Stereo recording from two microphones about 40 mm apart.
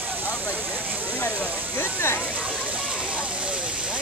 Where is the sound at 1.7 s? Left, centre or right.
Left.